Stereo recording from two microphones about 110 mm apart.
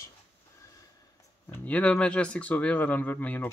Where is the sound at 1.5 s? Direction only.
15° left (ahead or behind).